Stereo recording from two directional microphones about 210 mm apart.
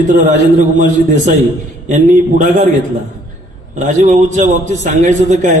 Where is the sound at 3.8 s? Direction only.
35° right (ahead or behind).